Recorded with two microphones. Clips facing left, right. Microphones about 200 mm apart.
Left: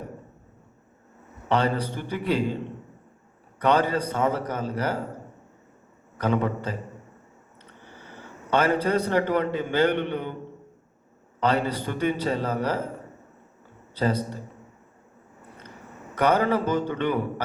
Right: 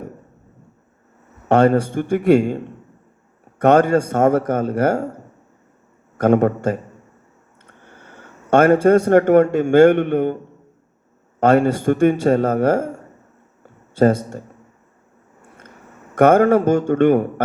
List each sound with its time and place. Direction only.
1.5 s a man's voice: 50° right (ahead or behind)
6.1 s a man's voice: 50° right (ahead or behind)
11.3 s a man's voice: 50° right (ahead or behind)
13.6 s a sound: 50° right (ahead or behind)
15.4 s vehicle: 50° right (ahead or behind)
16.1 s a man's voice: 50° right (ahead or behind)